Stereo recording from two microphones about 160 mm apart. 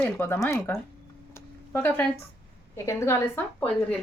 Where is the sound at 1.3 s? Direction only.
15° left (ahead or behind).